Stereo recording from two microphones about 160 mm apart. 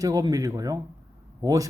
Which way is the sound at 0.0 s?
20° right (ahead or behind).